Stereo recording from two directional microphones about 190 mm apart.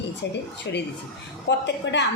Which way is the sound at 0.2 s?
65° left (ahead or behind).